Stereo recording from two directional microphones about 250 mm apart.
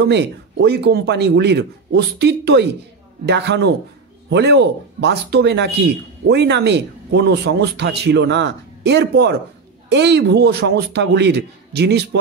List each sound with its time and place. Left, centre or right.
0.0 s speech: right